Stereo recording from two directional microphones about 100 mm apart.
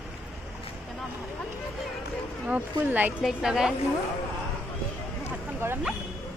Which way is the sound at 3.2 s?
5° right (ahead or behind).